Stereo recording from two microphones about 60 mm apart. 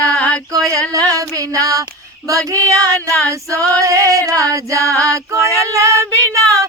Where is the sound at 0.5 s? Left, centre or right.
Right.